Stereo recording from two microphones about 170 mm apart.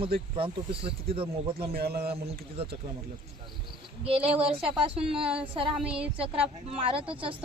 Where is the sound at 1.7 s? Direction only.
65° right (ahead or behind).